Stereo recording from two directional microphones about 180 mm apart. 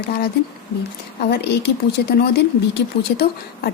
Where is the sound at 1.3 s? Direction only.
70° left (ahead or behind).